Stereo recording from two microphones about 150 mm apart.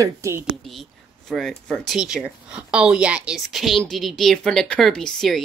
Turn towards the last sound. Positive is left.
turn(degrees=5)  # may be behind; listen again after turning